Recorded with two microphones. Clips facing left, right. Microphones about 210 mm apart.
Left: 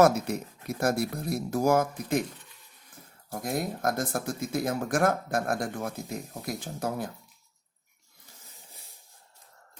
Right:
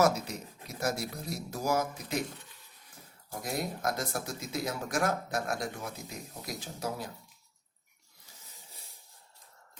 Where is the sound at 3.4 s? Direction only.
50° left (ahead or behind).